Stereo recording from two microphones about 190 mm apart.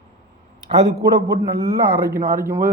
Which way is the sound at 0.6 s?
20° right (ahead or behind).